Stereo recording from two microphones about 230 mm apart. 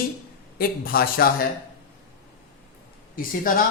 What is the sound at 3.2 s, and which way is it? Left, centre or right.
Speech, left.